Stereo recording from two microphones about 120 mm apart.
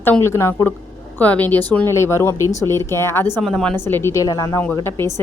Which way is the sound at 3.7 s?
20° left (ahead or behind).